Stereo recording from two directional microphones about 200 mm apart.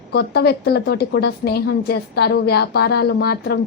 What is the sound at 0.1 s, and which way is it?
A woman's voice, 55° left (ahead or behind).